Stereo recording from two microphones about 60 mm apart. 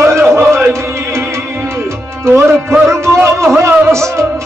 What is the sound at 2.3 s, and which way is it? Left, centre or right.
Music, right.